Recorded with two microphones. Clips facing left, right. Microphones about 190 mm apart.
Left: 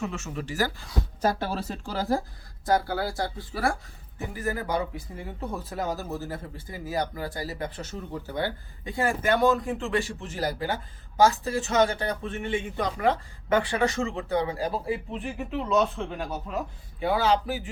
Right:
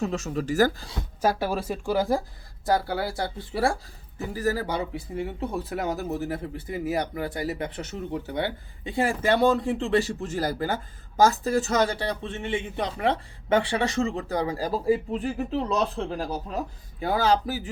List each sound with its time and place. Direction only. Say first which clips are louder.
0.0 s speech: right 5 dB; 35° right (ahead or behind)
1.2 s speech: right 3 dB; 10° right (ahead or behind); by 17.7 s 40° right (ahead or behind)